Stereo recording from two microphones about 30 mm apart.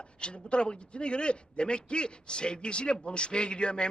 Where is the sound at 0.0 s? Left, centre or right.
Left.